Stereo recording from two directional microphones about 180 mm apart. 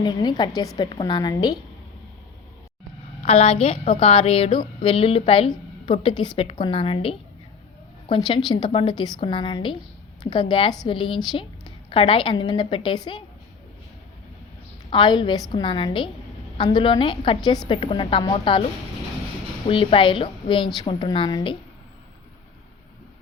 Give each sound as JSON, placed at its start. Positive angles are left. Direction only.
{"t": 0.0, "sound": "a woman's voice", "side_deg": 25}
{"t": 3.2, "sound": "a woman's voice", "side_deg": 35}
{"t": 14.8, "sound": "a woman's voice", "side_deg": 25}
{"t": 19.6, "sound": "a woman's voice", "side_deg": 30}